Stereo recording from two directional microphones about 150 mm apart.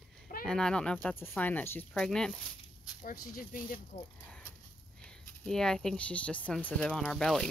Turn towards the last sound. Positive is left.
turn(degrees=5)  # may be behind; listen again after turning